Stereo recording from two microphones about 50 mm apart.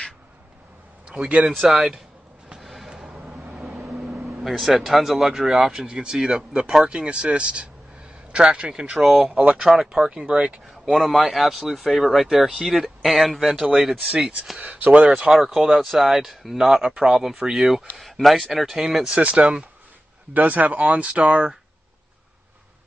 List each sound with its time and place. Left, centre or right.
1.0 s a man's voice: right
1.5 s speech: centre
2.6 s a sound: centre
3.1 s vehicle: right
4.4 s speech: centre
9.0 s speech: centre
9.3 s speech: right
9.7 s speech: centre
10.7 s speech: centre
13.6 s speech: centre
14.6 s speech: right
15.2 s speech: centre
19.2 s speech: right